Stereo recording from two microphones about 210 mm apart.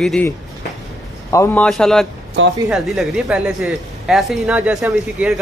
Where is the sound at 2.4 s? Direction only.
65° right (ahead or behind).